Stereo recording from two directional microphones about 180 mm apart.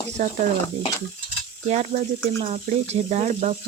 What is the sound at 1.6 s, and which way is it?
Speech, 40° right (ahead or behind).